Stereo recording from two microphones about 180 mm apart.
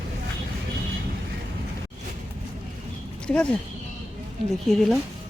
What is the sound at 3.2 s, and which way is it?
Speech, 5° left (ahead or behind).